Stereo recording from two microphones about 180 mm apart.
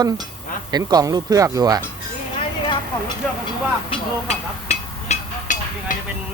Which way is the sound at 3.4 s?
30° left (ahead or behind).